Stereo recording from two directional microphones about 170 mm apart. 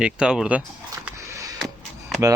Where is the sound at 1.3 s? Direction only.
20° right (ahead or behind).